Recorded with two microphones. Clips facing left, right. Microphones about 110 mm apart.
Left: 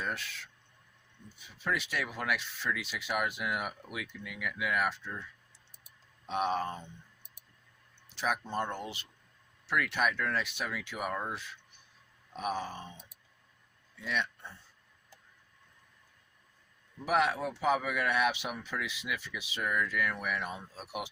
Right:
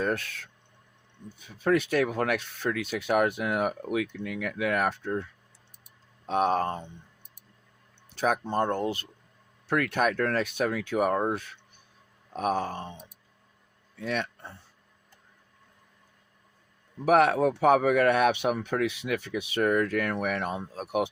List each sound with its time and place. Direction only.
0.0 s speech: 50° right (ahead or behind)
8.1 s speech: 50° right (ahead or behind)
14.0 s speech: 50° right (ahead or behind)
17.1 s speech: 55° right (ahead or behind)